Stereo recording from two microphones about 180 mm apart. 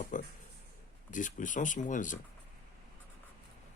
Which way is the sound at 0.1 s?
45° left (ahead or behind).